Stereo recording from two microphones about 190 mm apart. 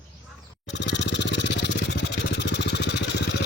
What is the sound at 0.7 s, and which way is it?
Vehicle, 65° left (ahead or behind).